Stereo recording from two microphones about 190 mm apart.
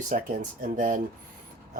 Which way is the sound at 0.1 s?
40° right (ahead or behind).